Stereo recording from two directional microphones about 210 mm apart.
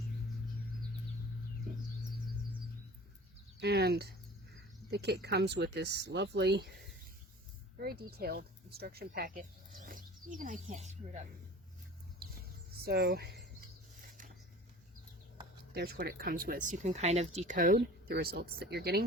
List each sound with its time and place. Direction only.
3.6 s speech: 50° right (ahead or behind); by 11.3 s 35° right (ahead or behind)
12.8 s speech: 50° right (ahead or behind)
14.0 s a sound: 40° right (ahead or behind)
15.7 s speech: 50° right (ahead or behind)